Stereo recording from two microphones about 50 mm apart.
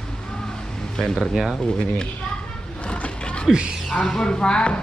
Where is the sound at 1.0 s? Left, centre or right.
Centre.